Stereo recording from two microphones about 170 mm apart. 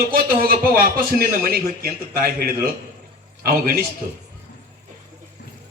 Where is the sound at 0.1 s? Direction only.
60° right (ahead or behind).